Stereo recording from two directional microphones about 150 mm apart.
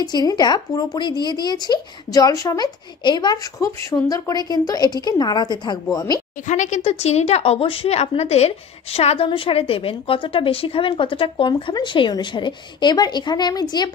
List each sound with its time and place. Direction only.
0.0 s speech: 25° left (ahead or behind)
6.4 s speech: 55° left (ahead or behind); by 13.8 s 25° left (ahead or behind)